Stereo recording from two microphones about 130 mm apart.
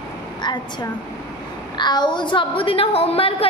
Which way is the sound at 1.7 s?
35° left (ahead or behind).